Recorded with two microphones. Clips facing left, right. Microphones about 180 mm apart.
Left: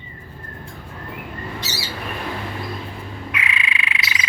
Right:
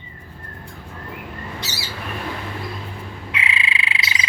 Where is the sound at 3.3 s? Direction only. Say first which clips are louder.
Right 1 dB; 30° right (ahead or behind).